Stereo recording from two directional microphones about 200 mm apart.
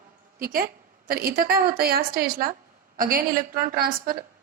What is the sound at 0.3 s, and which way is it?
A woman's voice, 45° right (ahead or behind).